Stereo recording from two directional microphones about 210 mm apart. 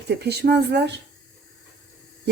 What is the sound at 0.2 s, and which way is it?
Speech, 50° right (ahead or behind).